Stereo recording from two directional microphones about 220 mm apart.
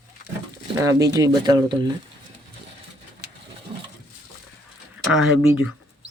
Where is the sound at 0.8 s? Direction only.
15° right (ahead or behind).